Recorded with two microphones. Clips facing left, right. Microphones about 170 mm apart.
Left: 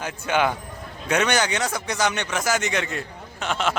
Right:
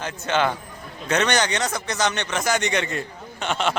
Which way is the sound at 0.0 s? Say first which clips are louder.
Even; 10° left (ahead or behind).